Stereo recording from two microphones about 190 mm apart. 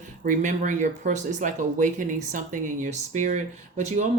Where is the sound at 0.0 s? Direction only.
40° right (ahead or behind).